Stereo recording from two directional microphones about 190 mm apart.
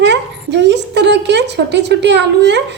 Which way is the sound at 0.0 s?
65° right (ahead or behind).